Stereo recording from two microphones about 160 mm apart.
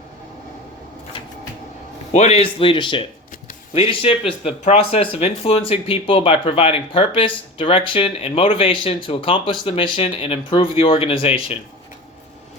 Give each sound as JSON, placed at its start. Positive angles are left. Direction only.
{"t": 2.1, "sound": "speech", "side_deg": 45}